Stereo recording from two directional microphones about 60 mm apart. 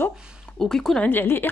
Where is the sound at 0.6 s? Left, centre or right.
Centre.